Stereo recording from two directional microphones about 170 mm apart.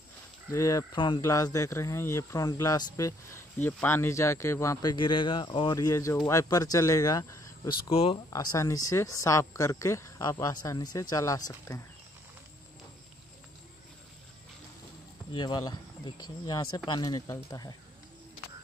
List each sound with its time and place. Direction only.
0.5 s speech: 20° left (ahead or behind)
8.3 s speech: 20° left (ahead or behind)
15.3 s speech: 25° left (ahead or behind)